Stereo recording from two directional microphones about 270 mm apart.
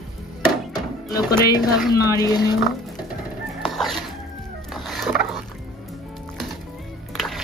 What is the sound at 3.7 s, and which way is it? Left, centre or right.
Music, centre.